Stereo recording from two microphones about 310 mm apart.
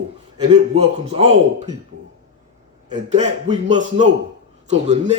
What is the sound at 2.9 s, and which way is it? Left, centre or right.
A man's voice, right.